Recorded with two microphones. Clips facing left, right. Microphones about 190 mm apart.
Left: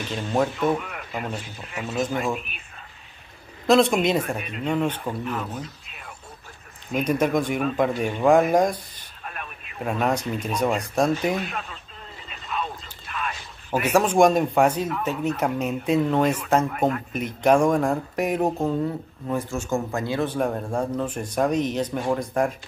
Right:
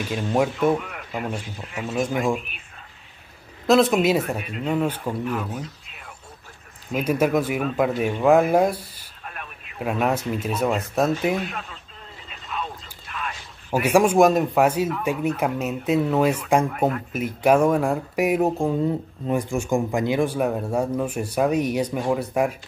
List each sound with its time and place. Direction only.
0.1 s speech: 10° right (ahead or behind)
3.6 s speech: centre (ahead or behind)
6.9 s speech: 5° right (ahead or behind)
13.1 s a sound: 60° left (ahead or behind)
13.7 s speech: 10° right (ahead or behind)